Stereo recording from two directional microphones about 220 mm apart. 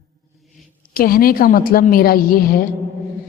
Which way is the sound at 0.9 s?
40° left (ahead or behind).